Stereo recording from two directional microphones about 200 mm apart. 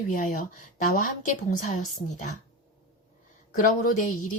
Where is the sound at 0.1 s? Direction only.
40° left (ahead or behind).